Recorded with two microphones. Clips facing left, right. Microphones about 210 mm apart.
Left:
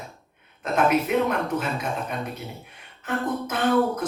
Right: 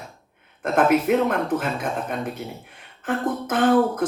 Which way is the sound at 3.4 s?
50° right (ahead or behind).